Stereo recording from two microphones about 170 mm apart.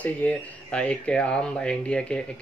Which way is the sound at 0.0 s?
10° left (ahead or behind).